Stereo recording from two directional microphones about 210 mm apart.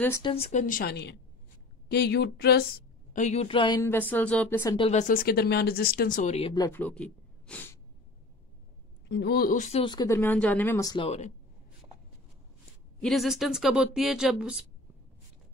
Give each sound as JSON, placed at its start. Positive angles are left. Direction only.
{"t": 0.2, "sound": "a woman's voice", "side_deg": 30}
{"t": 4.7, "sound": "speech", "side_deg": 30}
{"t": 6.5, "sound": "speech", "side_deg": 15}
{"t": 9.1, "sound": "a woman's voice", "side_deg": 50}
{"t": 13.0, "sound": "speech", "side_deg": 0}